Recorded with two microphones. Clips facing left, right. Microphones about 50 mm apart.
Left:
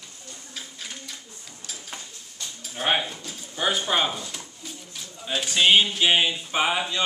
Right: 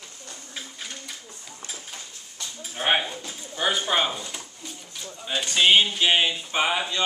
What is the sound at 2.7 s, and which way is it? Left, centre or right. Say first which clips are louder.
Bird: right 1 dB; centre.